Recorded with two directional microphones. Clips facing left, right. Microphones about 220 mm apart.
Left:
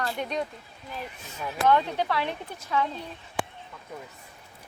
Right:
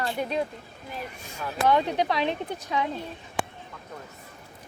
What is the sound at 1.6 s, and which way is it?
Speech, 15° right (ahead or behind).